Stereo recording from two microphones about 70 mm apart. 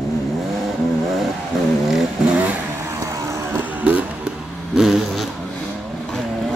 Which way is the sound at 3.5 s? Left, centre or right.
Right.